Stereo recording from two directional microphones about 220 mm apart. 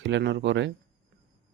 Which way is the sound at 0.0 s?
50° right (ahead or behind).